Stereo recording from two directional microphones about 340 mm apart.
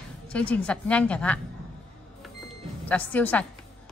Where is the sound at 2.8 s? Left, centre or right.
Centre.